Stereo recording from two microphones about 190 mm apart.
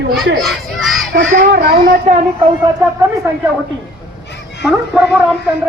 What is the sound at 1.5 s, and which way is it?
Speech, 55° right (ahead or behind).